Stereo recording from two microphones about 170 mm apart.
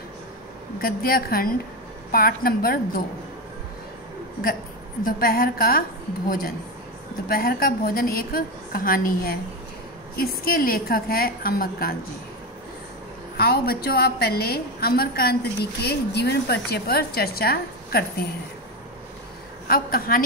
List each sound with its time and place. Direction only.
0.7 s a woman's voice: 60° left (ahead or behind)
5.0 s a woman's voice: 60° left (ahead or behind)
13.4 s a woman's voice: 65° left (ahead or behind)
19.7 s a woman's voice: 60° left (ahead or behind)